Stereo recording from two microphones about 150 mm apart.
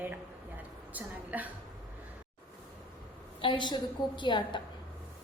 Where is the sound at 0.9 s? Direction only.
10° right (ahead or behind).